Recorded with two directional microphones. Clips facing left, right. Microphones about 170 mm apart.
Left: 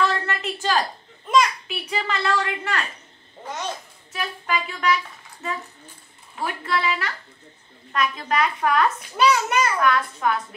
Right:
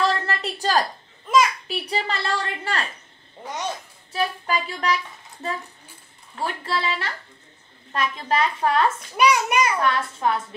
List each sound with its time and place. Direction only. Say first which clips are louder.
0.0 s a sound: even; 35° right (ahead or behind)
1.7 s a woman's voice: right 1 dB; 35° right (ahead or behind)
4.1 s a woman's voice: right 2 dB; 35° right (ahead or behind)
9.1 s a child's voice: even; 15° right (ahead or behind)
9.8 s a woman's voice: left 2 dB; 30° right (ahead or behind)